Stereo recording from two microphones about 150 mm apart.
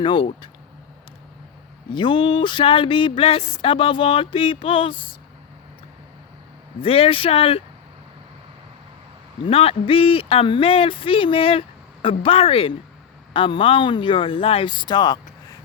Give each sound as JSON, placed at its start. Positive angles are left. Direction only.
{"t": 0.0, "sound": "speech", "side_deg": 35}
{"t": 1.9, "sound": "speech", "side_deg": 30}
{"t": 6.8, "sound": "speech", "side_deg": 40}
{"t": 9.5, "sound": "speech", "side_deg": 40}